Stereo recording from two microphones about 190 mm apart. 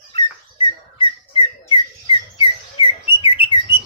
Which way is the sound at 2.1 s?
30° left (ahead or behind).